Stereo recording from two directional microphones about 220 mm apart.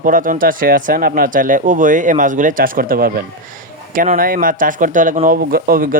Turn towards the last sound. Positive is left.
turn(degrees=-40)  # may be behind; listen again after turning